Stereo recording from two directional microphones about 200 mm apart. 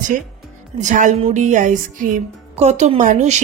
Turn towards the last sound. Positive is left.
turn(degrees=-35)  # may be behind; listen again after turning